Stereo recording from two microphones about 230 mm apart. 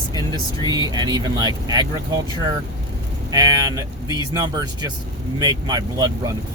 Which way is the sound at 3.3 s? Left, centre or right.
Centre.